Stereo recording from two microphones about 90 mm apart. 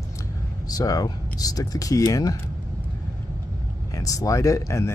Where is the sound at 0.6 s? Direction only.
45° left (ahead or behind).